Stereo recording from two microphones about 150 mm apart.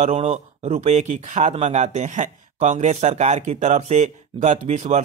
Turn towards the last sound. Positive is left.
turn(degrees=-50)  # may be behind; listen again after turning